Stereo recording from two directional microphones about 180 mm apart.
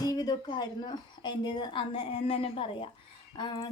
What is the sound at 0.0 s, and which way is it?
A woman's voice, 20° left (ahead or behind).